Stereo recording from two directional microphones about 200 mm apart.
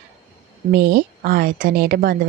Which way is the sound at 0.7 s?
50° right (ahead or behind).